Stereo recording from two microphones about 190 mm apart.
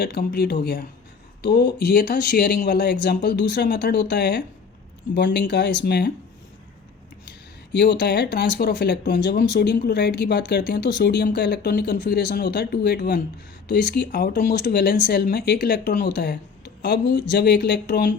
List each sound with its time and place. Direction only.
0.0 s speech: 55° left (ahead or behind)
7.7 s speech: 60° left (ahead or behind)